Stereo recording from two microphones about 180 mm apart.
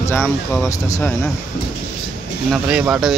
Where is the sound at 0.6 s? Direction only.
20° left (ahead or behind).